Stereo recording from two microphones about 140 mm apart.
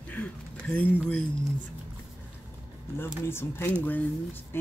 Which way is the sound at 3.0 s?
15° left (ahead or behind).